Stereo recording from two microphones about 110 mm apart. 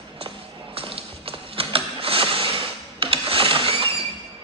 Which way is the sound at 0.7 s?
60° right (ahead or behind).